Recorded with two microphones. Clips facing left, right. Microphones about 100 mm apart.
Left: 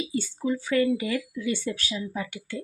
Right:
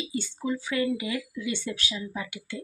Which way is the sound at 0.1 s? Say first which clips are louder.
Left 3 dB; 40° left (ahead or behind).